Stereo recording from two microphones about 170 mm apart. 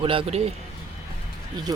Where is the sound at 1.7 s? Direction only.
20° right (ahead or behind).